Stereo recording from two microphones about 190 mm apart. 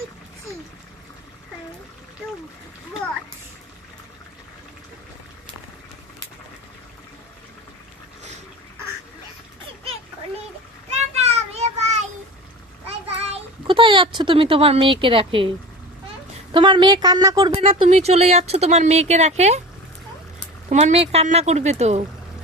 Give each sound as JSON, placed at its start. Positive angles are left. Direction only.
{"t": 10.9, "sound": "child singing", "side_deg": -35}
{"t": 12.9, "sound": "a child's voice", "side_deg": -30}
{"t": 16.5, "sound": "a woman's voice", "side_deg": -25}
{"t": 17.5, "sound": "speech", "side_deg": -30}
{"t": 20.7, "sound": "speech", "side_deg": -35}